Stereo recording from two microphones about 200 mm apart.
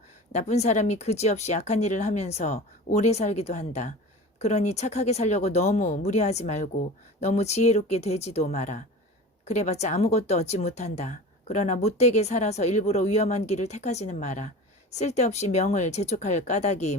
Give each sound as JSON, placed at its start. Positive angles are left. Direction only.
{"t": 0.3, "sound": "speech", "side_deg": 35}